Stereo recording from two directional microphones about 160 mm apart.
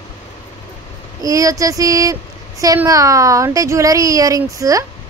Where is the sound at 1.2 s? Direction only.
20° right (ahead or behind).